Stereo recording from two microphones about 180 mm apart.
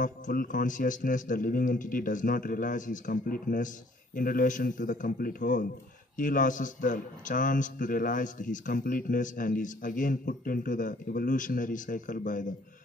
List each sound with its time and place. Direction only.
0.0 s a man's voice: 50° left (ahead or behind)